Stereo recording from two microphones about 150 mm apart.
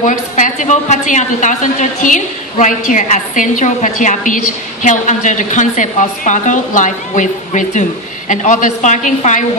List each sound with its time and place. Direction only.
0.0 s a woman's voice: 55° left (ahead or behind)